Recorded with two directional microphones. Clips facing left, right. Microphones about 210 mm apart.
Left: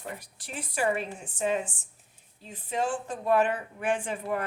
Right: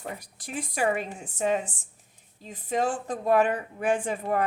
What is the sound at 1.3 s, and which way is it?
A woman's voice, 40° right (ahead or behind).